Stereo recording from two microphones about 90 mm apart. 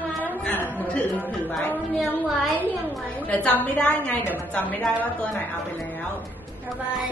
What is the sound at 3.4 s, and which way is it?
A woman's voice, 10° left (ahead or behind).